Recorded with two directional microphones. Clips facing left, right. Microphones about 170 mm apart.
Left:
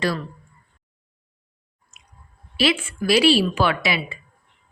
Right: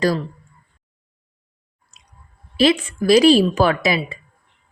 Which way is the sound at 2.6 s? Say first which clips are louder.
Right 5 dB; 40° right (ahead or behind).